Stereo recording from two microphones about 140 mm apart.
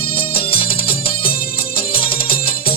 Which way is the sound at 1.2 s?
90° left.